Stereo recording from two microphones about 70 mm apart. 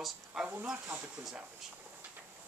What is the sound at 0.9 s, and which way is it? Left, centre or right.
Speech, right.